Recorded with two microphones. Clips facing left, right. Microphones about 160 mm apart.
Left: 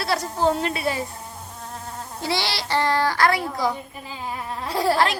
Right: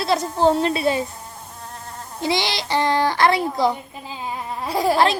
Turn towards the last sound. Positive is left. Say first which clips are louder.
# right 2 dB
turn(degrees=-15)  # may be behind; listen again after turning